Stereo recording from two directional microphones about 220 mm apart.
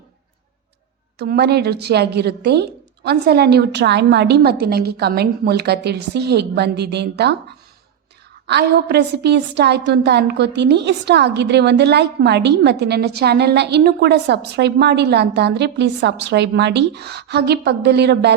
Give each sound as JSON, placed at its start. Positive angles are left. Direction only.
{"t": 1.2, "sound": "a woman's voice", "side_deg": -50}
{"t": 8.4, "sound": "a woman's voice", "side_deg": -50}